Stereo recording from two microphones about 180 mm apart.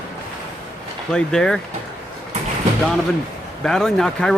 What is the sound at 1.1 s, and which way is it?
Speech, 5° left (ahead or behind).